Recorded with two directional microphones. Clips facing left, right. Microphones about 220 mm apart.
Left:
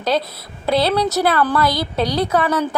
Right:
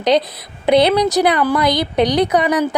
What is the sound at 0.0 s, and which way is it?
A woman's voice, 20° right (ahead or behind).